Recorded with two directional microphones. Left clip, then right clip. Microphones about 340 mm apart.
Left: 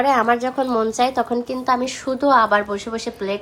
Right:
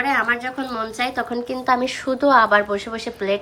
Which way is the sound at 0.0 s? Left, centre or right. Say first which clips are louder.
Left 3 dB; centre.